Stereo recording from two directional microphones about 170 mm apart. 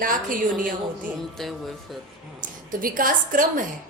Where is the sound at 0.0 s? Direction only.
55° right (ahead or behind).